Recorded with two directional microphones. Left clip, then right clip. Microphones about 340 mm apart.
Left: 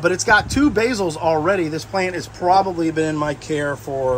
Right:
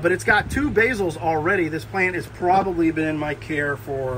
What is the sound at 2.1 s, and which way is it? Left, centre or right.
Speech, centre.